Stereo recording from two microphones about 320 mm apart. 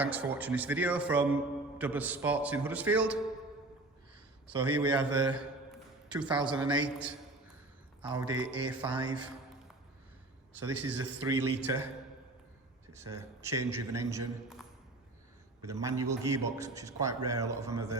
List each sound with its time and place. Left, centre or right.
0.0 s a man's voice: centre
4.8 s a man's voice: centre
10.9 s a man's voice: centre
13.0 s a man's voice: centre
15.6 s a man's voice: centre